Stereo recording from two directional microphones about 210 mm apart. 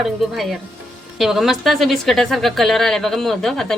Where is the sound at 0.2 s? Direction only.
Centre (ahead or behind).